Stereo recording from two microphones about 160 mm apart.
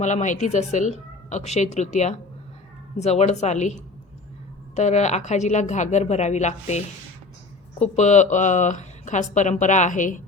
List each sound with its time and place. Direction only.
0.0 s speech: 50° left (ahead or behind)